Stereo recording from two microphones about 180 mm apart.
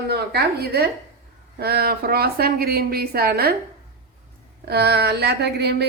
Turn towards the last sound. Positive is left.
turn(degrees=-65)  # may be behind; listen again after turning